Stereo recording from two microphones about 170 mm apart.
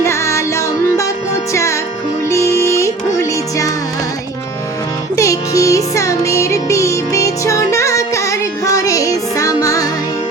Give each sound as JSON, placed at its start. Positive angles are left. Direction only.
{"t": 0.0, "sound": "music", "side_deg": 15}
{"t": 2.3, "sound": "music", "side_deg": 15}
{"t": 5.1, "sound": "music", "side_deg": 20}